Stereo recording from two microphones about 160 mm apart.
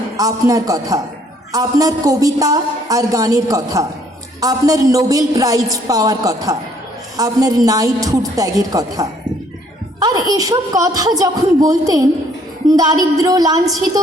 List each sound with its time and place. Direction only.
0.2 s a woman's voice: 20° right (ahead or behind)